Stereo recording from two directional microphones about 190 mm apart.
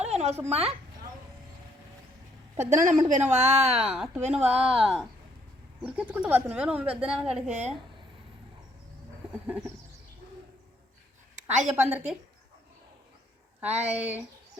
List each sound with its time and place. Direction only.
0.0 s a sound: 35° right (ahead or behind)
0.5 s speech: 30° right (ahead or behind)
2.6 s speech: 40° right (ahead or behind)
3.8 s speech: centre (ahead or behind)
4.4 s speech: 30° right (ahead or behind)
4.6 s speech: centre (ahead or behind)
9.3 s bird: 10° right (ahead or behind)
11.3 s a sound: 40° right (ahead or behind)
11.7 s speech: 5° right (ahead or behind)
13.7 s speech: 35° right (ahead or behind)